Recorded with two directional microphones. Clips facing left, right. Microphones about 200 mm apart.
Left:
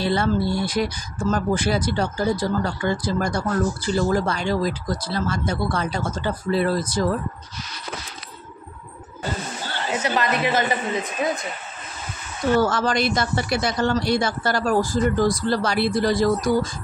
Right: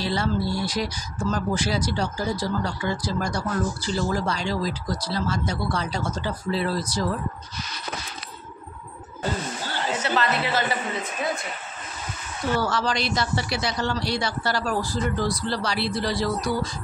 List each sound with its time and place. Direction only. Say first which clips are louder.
0.0 s speech: left 4 dB; 55° left (ahead or behind)
10.0 s a woman's voice: left 3 dB; 15° left (ahead or behind)
12.5 s speech: left 5 dB; 50° left (ahead or behind)